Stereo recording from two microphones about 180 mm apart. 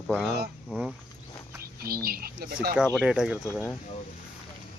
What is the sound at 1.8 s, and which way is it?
Speech, 55° right (ahead or behind).